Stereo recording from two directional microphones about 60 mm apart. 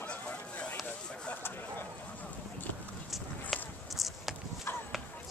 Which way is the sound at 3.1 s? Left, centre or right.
Centre.